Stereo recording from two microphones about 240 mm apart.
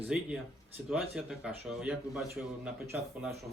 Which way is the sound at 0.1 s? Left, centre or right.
Centre.